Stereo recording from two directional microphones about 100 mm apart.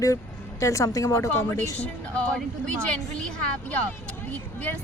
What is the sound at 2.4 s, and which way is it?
A woman's voice, 10° left (ahead or behind).